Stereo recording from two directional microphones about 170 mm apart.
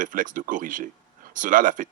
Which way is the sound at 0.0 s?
50° right (ahead or behind).